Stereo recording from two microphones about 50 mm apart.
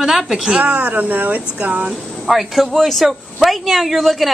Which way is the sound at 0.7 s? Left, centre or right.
Right.